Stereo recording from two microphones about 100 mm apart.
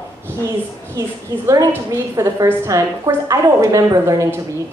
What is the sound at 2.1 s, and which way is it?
A woman's voice, 35° right (ahead or behind).